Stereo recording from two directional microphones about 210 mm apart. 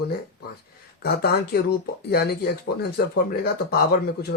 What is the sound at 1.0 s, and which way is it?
Speech, 50° left (ahead or behind).